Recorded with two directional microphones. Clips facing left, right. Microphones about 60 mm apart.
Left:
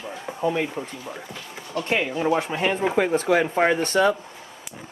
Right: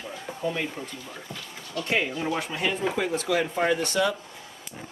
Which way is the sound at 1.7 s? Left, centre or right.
Left.